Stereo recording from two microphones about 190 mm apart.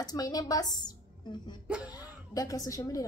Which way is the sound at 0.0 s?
20° left (ahead or behind).